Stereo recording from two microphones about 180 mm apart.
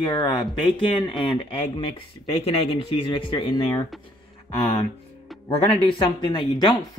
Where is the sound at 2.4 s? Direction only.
30° left (ahead or behind).